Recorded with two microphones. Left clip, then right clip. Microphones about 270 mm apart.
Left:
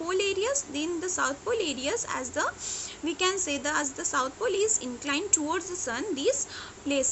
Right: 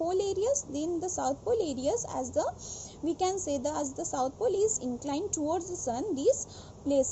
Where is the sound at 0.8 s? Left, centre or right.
Left.